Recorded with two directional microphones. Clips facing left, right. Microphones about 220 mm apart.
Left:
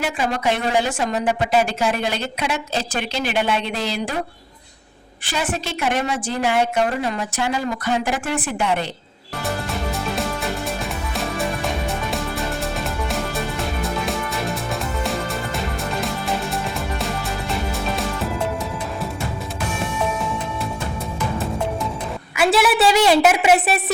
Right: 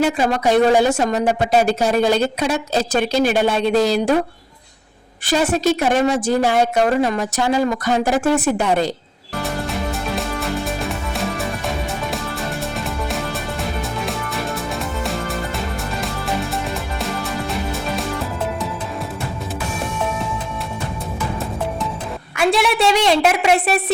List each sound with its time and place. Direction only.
0.0 s a woman's voice: 40° right (ahead or behind)
5.2 s a woman's voice: 40° right (ahead or behind)
10.2 s music: centre (ahead or behind)
12.8 s music: centre (ahead or behind)
22.4 s a woman's voice: 5° left (ahead or behind)